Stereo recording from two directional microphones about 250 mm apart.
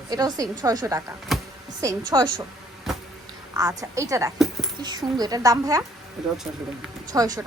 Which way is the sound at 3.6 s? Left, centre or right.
Centre.